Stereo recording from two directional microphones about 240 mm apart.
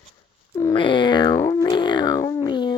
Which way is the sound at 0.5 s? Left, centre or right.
Centre.